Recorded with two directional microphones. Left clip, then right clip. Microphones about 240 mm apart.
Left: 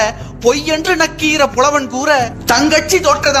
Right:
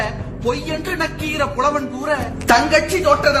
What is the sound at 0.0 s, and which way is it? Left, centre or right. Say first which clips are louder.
A man's voice: left 9 dB; left.